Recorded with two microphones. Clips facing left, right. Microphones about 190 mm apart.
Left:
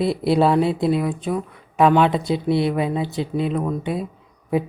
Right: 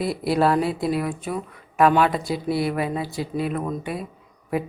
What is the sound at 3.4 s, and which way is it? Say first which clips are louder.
Speech: left 3 dB; 5° right (ahead or behind).